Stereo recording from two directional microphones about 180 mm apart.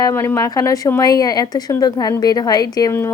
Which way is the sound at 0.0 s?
15° left (ahead or behind).